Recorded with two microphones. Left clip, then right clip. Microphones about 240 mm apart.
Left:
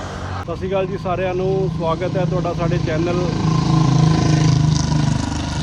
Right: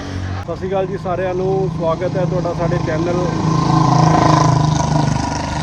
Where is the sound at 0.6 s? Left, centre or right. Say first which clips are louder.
Right 1 dB; centre.